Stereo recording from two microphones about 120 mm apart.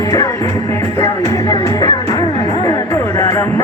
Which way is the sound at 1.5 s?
35° left (ahead or behind).